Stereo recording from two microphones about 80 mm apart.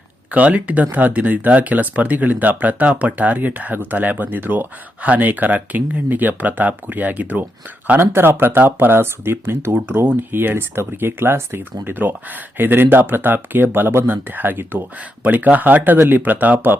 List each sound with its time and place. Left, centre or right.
0.3 s speech: centre